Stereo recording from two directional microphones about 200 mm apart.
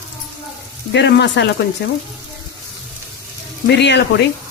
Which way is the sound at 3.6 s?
60° left (ahead or behind).